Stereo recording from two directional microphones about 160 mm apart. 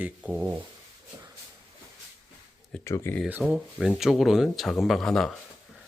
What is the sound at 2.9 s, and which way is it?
Speech, 15° left (ahead or behind).